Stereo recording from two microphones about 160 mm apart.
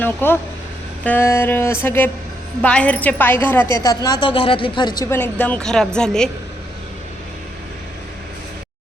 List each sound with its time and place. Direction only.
0.0 s a woman's voice: 10° left (ahead or behind)
3.8 s speech: 25° left (ahead or behind)
5.0 s a woman's voice: 15° left (ahead or behind)